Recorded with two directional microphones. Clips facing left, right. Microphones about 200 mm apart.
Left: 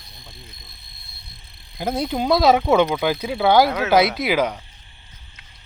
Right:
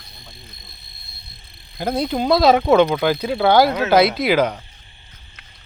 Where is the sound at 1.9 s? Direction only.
15° left (ahead or behind).